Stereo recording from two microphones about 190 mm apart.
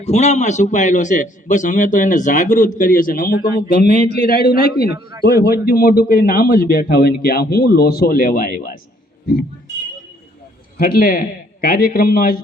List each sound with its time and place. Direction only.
0.0 s a man's voice: 35° left (ahead or behind)
10.8 s speech: 50° left (ahead or behind)